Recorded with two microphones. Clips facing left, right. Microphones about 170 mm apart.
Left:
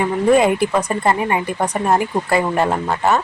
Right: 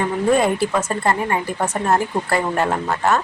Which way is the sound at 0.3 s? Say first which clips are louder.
Left 3 dB; 15° left (ahead or behind).